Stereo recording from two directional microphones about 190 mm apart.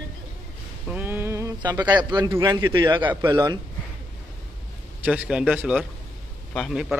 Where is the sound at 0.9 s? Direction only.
10° right (ahead or behind).